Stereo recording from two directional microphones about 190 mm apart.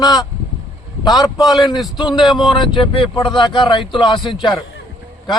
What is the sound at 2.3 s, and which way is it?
A man's voice, 25° left (ahead or behind).